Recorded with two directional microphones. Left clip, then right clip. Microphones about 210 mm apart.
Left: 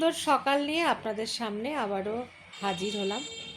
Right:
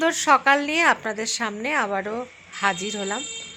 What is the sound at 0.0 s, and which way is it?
A woman's voice, 15° right (ahead or behind).